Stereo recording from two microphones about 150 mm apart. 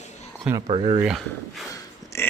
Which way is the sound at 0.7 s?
35° right (ahead or behind).